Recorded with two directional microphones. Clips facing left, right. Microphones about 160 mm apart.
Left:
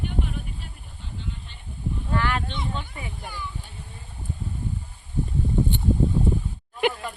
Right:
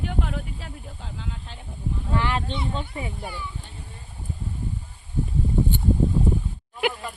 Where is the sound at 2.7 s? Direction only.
30° right (ahead or behind).